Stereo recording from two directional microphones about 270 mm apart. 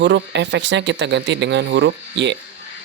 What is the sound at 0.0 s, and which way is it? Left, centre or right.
Speech, right.